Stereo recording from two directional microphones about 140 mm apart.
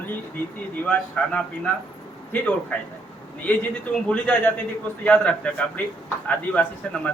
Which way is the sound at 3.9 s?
10° left (ahead or behind).